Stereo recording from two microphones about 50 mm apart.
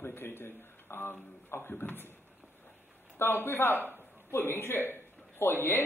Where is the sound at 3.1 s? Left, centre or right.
Left.